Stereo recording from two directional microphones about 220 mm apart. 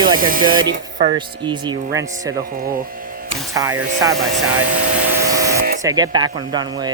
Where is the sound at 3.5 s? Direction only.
15° right (ahead or behind).